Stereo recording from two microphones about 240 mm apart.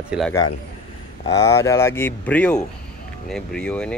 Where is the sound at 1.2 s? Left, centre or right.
Centre.